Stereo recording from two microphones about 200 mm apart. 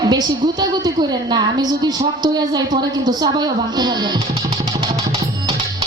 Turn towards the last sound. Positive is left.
turn(degrees=-20)  # may be behind; listen again after turning